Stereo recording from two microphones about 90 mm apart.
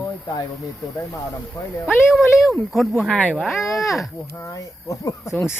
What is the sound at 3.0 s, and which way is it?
Speech, 15° left (ahead or behind).